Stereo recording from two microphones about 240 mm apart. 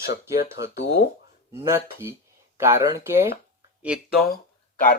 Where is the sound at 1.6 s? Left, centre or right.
Centre.